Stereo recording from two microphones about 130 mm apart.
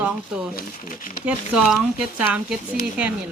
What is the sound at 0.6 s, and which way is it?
Speech, 90° left.